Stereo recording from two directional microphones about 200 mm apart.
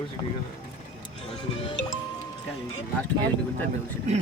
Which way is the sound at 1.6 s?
25° left (ahead or behind).